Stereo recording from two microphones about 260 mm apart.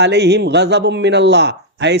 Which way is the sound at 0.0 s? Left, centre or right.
Right.